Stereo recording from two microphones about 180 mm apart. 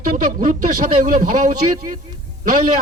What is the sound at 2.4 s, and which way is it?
Speech, 50° right (ahead or behind).